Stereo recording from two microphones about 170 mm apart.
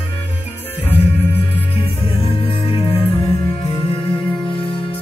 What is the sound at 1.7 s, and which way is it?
Music, 35° left (ahead or behind).